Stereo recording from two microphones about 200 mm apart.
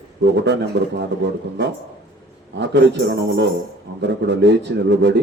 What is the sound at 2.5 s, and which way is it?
Speech, 60° right (ahead or behind).